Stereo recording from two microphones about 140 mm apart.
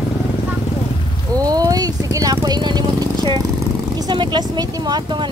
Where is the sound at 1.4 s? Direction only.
25° right (ahead or behind).